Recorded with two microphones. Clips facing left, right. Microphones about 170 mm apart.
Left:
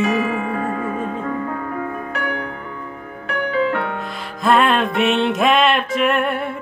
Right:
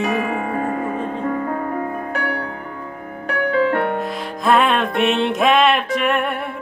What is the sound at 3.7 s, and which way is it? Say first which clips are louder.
Music: right 3 dB; 50° right (ahead or behind).